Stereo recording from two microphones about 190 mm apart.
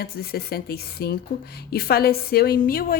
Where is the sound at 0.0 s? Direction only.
55° left (ahead or behind).